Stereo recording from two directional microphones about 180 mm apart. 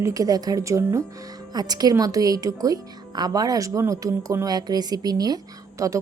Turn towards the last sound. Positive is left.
turn(degrees=-15)  # may be behind; listen again after turning